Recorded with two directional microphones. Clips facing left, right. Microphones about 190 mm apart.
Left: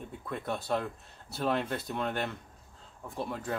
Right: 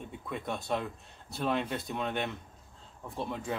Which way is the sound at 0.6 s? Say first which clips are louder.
Left 2 dB; 15° right (ahead or behind).